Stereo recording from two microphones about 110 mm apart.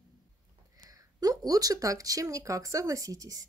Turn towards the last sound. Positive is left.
turn(degrees=-30)  # may be behind; listen again after turning